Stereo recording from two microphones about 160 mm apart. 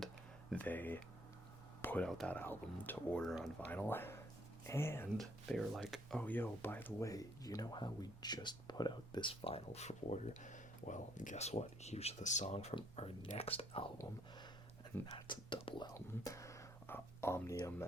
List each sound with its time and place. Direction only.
0.5 s speech: 10° left (ahead or behind)
5.1 s speech: centre (ahead or behind); by 13.9 s 35° left (ahead or behind)
15.1 s speech: 30° left (ahead or behind)
16.0 s whispering: 20° left (ahead or behind)